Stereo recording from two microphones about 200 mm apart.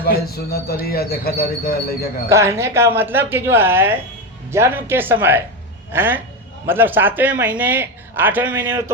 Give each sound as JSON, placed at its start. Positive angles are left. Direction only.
{"t": 0.0, "sound": "speech", "side_deg": 50}
{"t": 2.3, "sound": "speech", "side_deg": -15}